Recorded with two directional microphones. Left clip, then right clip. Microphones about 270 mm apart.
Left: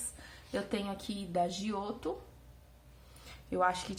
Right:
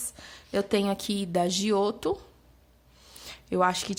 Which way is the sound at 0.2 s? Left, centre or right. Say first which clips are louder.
Right 9 dB; right.